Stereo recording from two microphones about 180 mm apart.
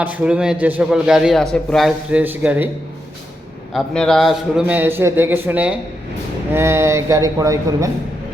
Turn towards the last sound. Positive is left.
turn(degrees=-20)  # may be behind; listen again after turning